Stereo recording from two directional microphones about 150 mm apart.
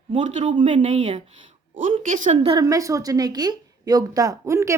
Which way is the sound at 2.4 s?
30° right (ahead or behind).